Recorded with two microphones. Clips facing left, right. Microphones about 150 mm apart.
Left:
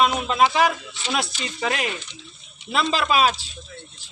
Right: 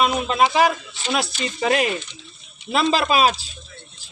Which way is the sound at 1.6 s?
35° right (ahead or behind).